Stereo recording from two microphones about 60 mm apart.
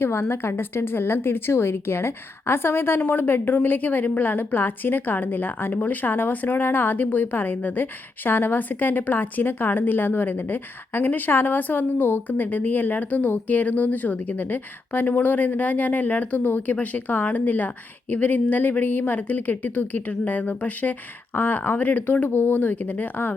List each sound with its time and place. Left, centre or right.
0.0 s a woman's voice: left